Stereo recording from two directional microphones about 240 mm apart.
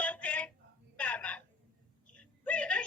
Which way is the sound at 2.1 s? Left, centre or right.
Centre.